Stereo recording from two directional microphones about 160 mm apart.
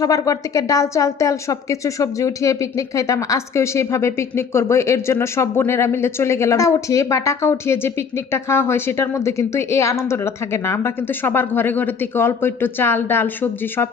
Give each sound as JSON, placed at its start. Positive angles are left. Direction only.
{"t": 0.0, "sound": "a woman's voice", "side_deg": 20}